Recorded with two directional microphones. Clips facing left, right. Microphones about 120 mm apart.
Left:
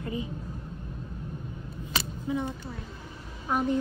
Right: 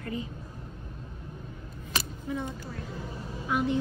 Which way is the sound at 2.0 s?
15° left (ahead or behind).